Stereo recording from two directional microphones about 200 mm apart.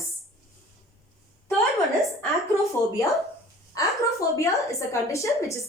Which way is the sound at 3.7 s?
15° left (ahead or behind).